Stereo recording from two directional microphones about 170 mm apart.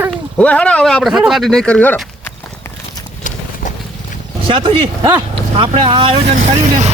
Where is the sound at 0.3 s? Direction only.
5° left (ahead or behind).